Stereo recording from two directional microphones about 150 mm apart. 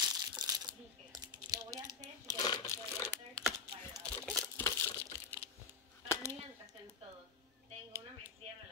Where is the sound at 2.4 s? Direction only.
25° left (ahead or behind).